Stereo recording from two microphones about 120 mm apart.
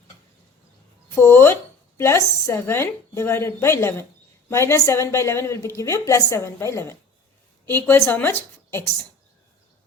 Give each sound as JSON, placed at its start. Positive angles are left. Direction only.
{"t": 1.1, "sound": "a woman's voice", "side_deg": 20}